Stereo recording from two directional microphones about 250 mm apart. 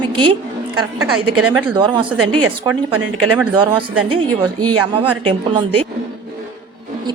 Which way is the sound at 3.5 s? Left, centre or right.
Centre.